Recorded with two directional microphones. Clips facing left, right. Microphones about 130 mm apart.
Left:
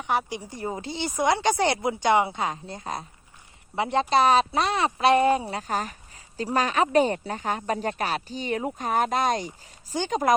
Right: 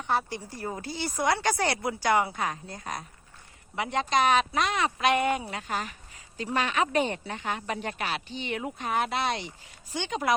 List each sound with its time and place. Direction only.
0.0 s speech: 15° left (ahead or behind); by 10.3 s 40° left (ahead or behind)